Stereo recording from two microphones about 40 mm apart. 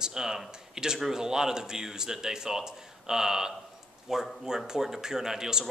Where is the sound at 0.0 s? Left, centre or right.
Centre.